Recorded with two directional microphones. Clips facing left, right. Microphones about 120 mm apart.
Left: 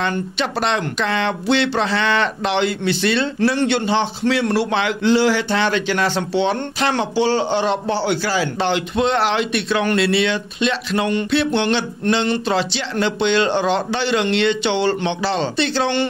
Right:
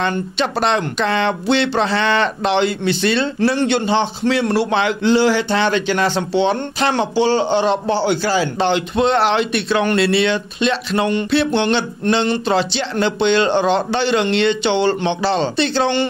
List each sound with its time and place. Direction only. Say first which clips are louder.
0.1 s speech: right 2 dB; 30° right (ahead or behind)